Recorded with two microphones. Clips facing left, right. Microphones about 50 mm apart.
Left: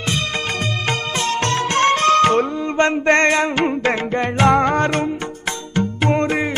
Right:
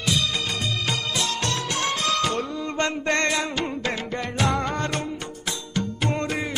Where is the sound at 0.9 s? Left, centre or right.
Left.